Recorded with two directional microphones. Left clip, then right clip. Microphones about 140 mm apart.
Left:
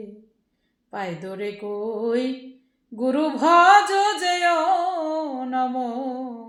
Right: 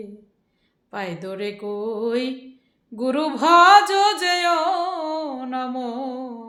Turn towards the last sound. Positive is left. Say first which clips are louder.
# left 1 dB
turn(degrees=-20)  # may be behind; listen again after turning